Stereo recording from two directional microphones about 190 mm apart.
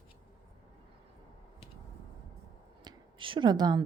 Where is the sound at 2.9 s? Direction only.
25° right (ahead or behind).